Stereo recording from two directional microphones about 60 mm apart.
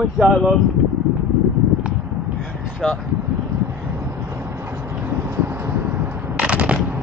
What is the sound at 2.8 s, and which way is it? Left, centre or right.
Speech, centre.